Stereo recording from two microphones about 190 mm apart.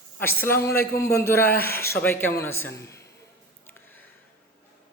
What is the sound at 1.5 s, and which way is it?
Speech, 55° left (ahead or behind).